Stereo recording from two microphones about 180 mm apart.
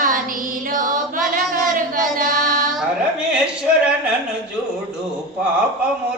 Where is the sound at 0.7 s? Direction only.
50° right (ahead or behind).